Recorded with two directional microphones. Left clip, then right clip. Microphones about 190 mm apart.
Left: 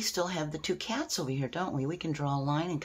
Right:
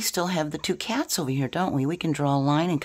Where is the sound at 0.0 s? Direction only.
55° right (ahead or behind).